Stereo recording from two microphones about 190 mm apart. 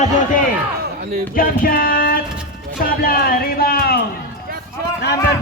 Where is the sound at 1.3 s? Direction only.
50° left (ahead or behind).